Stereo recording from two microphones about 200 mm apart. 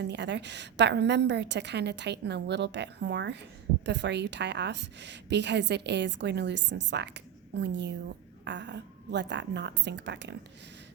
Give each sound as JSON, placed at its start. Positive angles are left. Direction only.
{"t": 0.0, "sound": "a woman's voice", "side_deg": -60}